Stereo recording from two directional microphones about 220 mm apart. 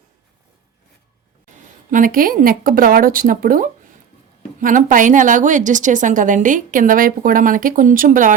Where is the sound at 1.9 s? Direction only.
40° right (ahead or behind).